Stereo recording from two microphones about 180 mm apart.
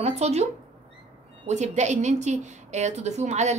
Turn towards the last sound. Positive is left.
turn(degrees=-40)  # may be behind; listen again after turning